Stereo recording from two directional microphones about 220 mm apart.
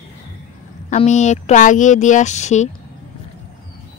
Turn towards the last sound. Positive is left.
turn(degrees=30)  # may be behind; listen again after turning